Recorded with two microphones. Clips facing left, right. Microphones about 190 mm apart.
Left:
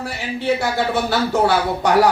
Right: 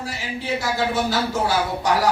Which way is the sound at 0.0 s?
60° left (ahead or behind).